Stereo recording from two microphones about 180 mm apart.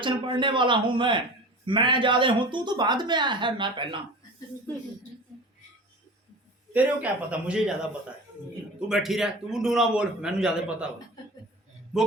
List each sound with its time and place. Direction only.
0.0 s speech: 25° right (ahead or behind)
6.7 s a man's voice: 5° right (ahead or behind)
8.9 s a man's voice: centre (ahead or behind)